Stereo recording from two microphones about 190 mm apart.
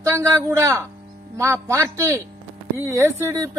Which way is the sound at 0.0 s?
15° right (ahead or behind).